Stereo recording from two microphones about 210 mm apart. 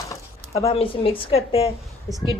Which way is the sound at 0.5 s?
30° left (ahead or behind).